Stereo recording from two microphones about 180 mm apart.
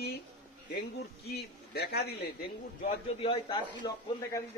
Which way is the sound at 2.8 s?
30° left (ahead or behind).